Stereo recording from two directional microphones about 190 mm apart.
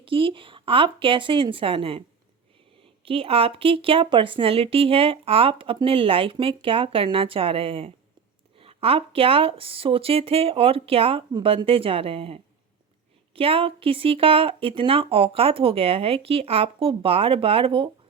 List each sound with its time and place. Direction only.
0.0 s speech: 30° right (ahead or behind)
3.0 s speech: 30° right (ahead or behind)